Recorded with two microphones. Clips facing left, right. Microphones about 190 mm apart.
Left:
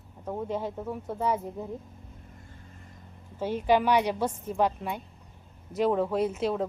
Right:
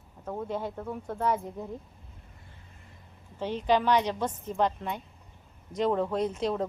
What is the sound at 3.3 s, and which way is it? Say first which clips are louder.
A woman's voice: left 2 dB; 10° left (ahead or behind).